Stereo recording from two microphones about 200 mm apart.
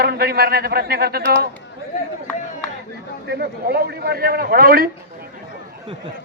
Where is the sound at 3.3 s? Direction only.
55° right (ahead or behind).